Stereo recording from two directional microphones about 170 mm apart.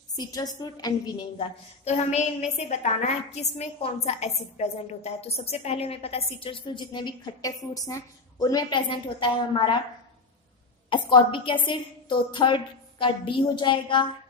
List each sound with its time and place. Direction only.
0.2 s a woman's voice: 20° left (ahead or behind)
1.8 s a woman's voice: 40° left (ahead or behind)
10.8 s a woman's voice: 30° left (ahead or behind)